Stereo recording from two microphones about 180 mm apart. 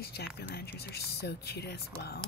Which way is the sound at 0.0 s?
65° left (ahead or behind).